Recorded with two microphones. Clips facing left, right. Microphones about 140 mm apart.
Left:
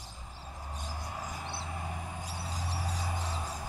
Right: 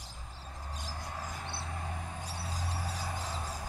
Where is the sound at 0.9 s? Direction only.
5° left (ahead or behind).